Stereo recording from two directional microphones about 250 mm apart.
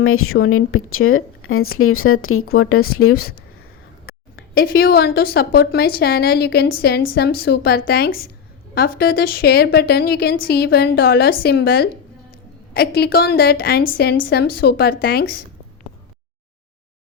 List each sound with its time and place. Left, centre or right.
0.0 s speech: left
4.1 s a sound: left
4.5 s a woman's voice: left